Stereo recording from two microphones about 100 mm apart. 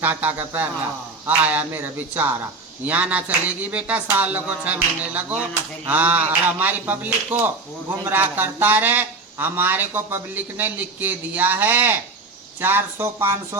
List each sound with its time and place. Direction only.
0.0 s speech: 20° right (ahead or behind)